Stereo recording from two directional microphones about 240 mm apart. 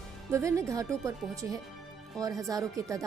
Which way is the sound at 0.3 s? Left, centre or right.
Centre.